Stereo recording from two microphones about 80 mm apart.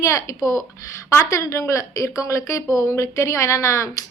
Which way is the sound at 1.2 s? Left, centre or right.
Left.